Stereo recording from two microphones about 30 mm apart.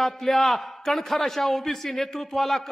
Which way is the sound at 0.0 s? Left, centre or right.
Centre.